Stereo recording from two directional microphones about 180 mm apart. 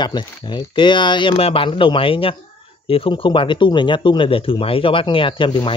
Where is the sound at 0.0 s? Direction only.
25° left (ahead or behind).